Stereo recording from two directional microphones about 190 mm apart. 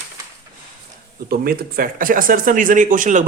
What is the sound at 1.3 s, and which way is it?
A man's voice, 50° right (ahead or behind).